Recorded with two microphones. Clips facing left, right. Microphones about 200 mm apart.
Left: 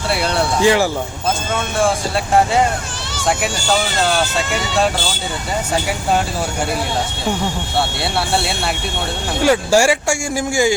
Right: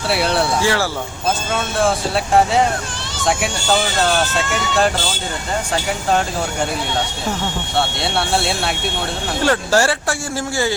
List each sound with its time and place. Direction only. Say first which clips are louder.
0.1 s speech: right 1 dB; centre (ahead or behind)
0.6 s speech: left 5 dB; 15° left (ahead or behind)
1.8 s speech: even; centre (ahead or behind)
7.8 s speech: even; centre (ahead or behind)